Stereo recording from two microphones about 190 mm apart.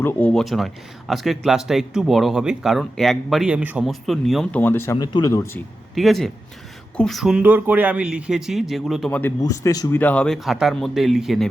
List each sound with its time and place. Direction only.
0.0 s speech: 10° left (ahead or behind)
4.6 s speech: 10° left (ahead or behind)
5.9 s speech: centre (ahead or behind)
9.4 s speech: 20° left (ahead or behind)
10.0 s speech: 5° left (ahead or behind)